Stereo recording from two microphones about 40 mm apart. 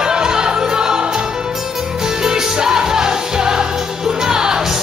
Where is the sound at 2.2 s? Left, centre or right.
Centre.